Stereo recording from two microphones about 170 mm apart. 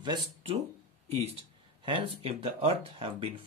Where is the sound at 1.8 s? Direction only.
30° right (ahead or behind).